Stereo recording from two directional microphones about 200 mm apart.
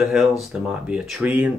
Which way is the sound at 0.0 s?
Centre (ahead or behind).